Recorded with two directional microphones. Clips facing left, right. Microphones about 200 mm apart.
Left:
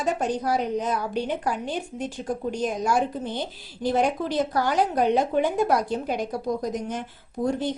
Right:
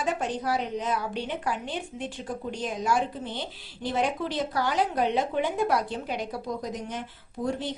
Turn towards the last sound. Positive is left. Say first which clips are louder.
# left 4 dB
turn(degrees=40)  # may be behind; listen again after turning